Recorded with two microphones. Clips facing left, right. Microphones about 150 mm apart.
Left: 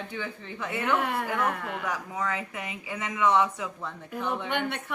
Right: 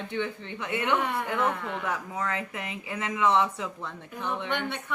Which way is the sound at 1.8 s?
30° right (ahead or behind).